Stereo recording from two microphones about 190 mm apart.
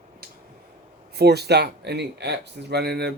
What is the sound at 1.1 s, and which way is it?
Speech, 60° right (ahead or behind).